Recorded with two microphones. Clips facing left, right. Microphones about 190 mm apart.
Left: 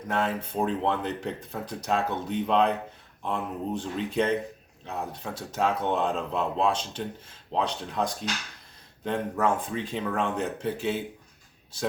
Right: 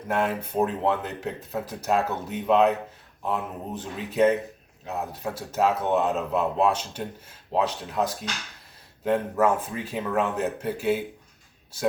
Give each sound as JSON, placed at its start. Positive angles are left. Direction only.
{"t": 0.1, "sound": "a man's voice", "side_deg": -10}